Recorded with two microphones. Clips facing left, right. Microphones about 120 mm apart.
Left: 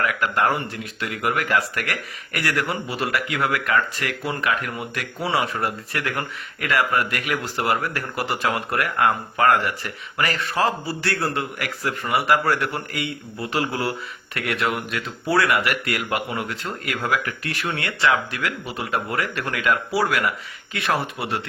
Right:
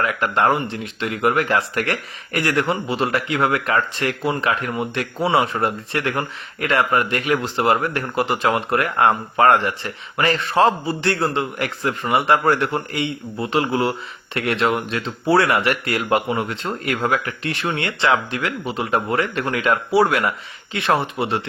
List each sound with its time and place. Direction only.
0.0 s speech: 25° right (ahead or behind)